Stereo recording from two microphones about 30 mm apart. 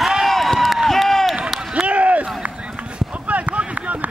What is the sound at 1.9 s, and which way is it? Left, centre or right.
Run, right.